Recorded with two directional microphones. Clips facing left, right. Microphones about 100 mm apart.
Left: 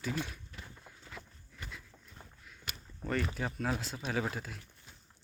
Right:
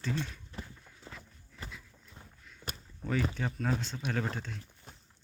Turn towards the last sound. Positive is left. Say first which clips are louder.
# even
turn(degrees=5)  # may be behind; listen again after turning